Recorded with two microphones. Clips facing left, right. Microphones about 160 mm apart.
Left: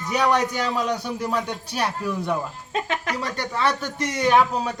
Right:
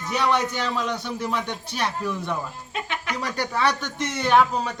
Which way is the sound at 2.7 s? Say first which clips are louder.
Left 6 dB; 40° left (ahead or behind).